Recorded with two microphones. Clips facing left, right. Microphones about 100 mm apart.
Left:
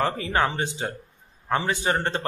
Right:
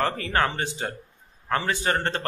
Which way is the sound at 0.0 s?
15° left (ahead or behind).